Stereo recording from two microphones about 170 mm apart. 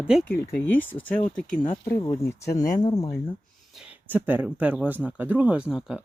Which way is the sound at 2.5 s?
20° left (ahead or behind).